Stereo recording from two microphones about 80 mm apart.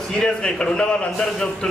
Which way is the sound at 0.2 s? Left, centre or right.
Centre.